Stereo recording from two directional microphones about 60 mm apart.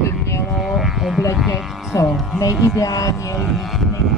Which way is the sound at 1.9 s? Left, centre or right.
Left.